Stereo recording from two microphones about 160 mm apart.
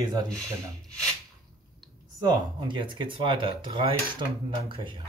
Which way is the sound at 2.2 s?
25° right (ahead or behind).